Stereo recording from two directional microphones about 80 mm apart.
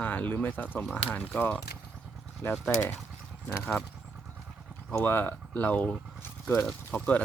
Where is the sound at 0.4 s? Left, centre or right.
Centre.